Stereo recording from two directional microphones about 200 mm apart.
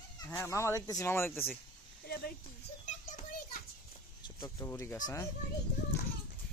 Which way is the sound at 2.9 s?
40° left (ahead or behind).